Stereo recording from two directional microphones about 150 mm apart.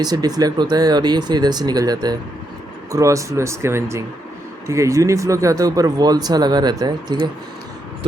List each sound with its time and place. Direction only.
0.0 s speech: 25° right (ahead or behind)